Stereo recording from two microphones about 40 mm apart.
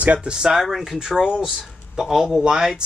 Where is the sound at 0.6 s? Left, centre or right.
Centre.